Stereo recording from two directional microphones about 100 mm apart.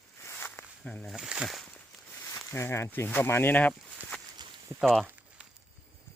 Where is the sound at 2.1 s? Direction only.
30° left (ahead or behind).